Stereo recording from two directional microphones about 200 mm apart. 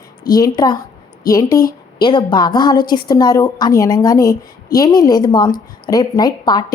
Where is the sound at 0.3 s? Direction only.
20° left (ahead or behind).